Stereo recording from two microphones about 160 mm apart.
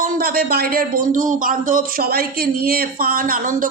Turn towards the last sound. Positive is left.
turn(degrees=-60)  # may be behind; listen again after turning